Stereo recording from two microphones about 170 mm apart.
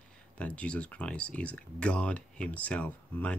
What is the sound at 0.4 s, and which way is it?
Speech, 5° left (ahead or behind).